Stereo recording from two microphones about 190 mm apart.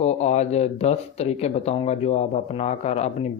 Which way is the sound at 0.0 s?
35° left (ahead or behind).